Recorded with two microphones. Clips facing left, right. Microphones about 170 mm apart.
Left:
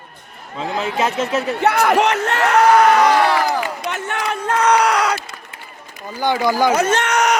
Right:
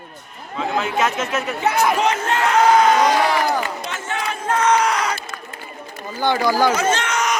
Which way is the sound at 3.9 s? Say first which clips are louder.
Left 3 dB; 60° left (ahead or behind).